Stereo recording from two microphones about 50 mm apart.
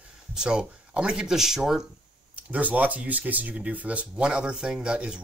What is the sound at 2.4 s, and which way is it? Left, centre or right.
Speech, right.